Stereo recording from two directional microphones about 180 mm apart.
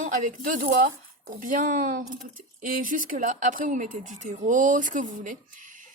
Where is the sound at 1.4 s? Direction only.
50° right (ahead or behind).